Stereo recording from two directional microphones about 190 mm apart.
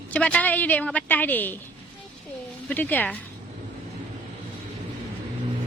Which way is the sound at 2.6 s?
10° left (ahead or behind).